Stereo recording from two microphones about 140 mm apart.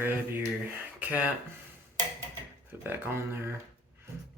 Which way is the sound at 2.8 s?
15° right (ahead or behind).